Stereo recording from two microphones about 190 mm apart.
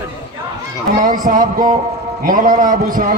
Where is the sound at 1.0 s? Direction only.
45° right (ahead or behind).